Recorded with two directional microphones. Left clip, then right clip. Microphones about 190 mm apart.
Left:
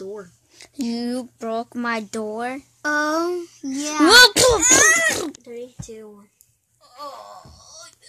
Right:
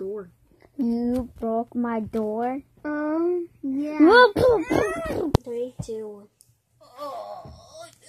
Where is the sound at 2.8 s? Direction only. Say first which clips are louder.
Left 5 dB; 60° left (ahead or behind).